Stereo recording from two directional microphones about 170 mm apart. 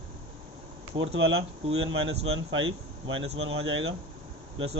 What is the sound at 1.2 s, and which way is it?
Speech, 35° right (ahead or behind).